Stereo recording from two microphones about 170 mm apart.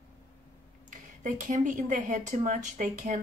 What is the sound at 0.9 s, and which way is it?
Speech, 50° right (ahead or behind).